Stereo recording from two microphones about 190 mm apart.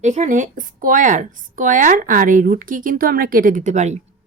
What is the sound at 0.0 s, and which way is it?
Speech, 40° right (ahead or behind).